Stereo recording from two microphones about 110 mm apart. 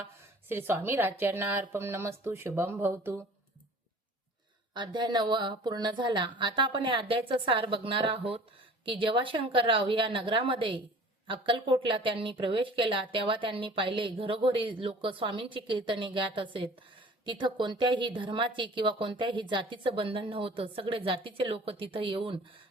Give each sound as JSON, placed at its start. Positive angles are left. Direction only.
{"t": 0.4, "sound": "speech", "side_deg": -20}
{"t": 4.7, "sound": "a woman's voice", "side_deg": -45}